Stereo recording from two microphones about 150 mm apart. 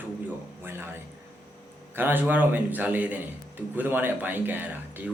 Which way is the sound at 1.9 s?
15° right (ahead or behind).